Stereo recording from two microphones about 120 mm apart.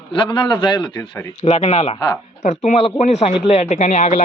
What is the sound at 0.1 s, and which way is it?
A man's voice, 40° left (ahead or behind).